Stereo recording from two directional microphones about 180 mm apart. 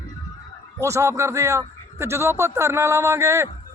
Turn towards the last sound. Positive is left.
turn(degrees=-15)  # may be behind; listen again after turning